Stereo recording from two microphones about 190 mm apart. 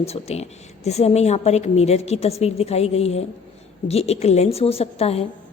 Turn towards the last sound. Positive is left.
turn(degrees=35)  # may be behind; listen again after turning